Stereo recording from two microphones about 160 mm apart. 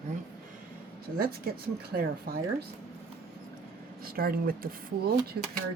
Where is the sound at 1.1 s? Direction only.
65° right (ahead or behind).